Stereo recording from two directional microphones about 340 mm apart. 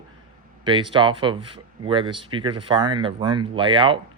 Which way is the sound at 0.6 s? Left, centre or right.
Centre.